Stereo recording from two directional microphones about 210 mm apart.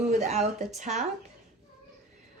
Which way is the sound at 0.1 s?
35° right (ahead or behind).